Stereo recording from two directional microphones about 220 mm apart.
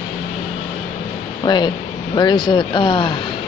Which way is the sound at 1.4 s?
20° left (ahead or behind).